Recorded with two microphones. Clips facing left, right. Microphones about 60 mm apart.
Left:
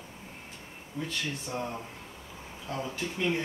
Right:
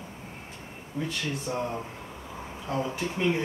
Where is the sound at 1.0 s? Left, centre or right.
Centre.